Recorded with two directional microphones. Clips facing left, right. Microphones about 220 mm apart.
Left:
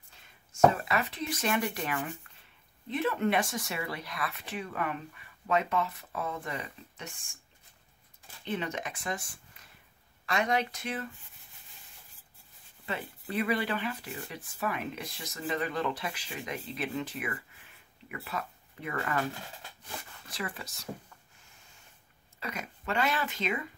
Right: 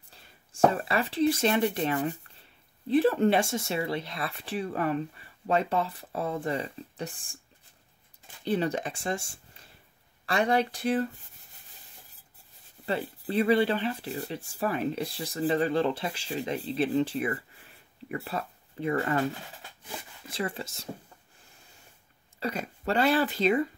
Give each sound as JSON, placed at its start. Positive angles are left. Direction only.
{"t": 0.1, "sound": "speech", "side_deg": -35}
{"t": 8.5, "sound": "speech", "side_deg": -35}
{"t": 12.8, "sound": "speech", "side_deg": -35}
{"t": 20.2, "sound": "speech", "side_deg": -25}
{"t": 22.4, "sound": "speech", "side_deg": -30}